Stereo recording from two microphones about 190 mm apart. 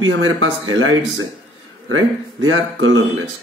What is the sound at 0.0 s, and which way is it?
Speech, 90° right.